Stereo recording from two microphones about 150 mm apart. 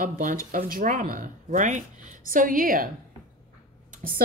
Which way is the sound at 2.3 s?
65° right (ahead or behind).